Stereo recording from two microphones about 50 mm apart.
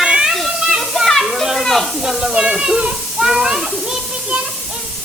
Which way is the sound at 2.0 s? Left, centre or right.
Centre.